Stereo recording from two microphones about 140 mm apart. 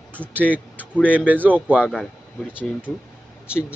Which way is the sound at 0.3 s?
10° right (ahead or behind).